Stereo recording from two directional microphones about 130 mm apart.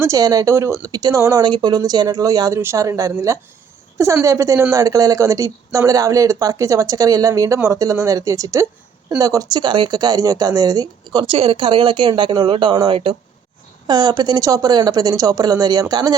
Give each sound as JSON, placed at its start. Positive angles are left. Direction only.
{"t": 0.0, "sound": "speech", "side_deg": -25}